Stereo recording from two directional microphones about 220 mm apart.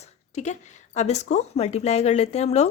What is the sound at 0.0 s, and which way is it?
A woman's voice, 30° left (ahead or behind).